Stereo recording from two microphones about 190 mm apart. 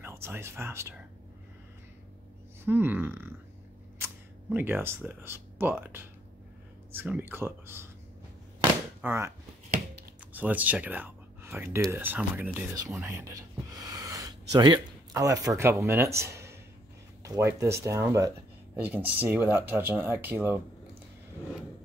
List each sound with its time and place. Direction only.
0.0 s speech: 10° right (ahead or behind)
2.6 s speech: 10° right (ahead or behind)
9.0 s speech: 10° right (ahead or behind)
10.3 s speech: 10° right (ahead or behind)
13.8 s a sound: 20° right (ahead or behind)
14.5 s speech: 20° right (ahead or behind)